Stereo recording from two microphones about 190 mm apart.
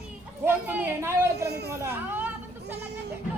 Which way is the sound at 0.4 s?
10° right (ahead or behind).